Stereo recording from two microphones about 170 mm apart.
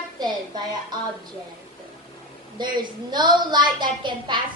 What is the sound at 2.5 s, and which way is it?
A woman's voice, 25° right (ahead or behind).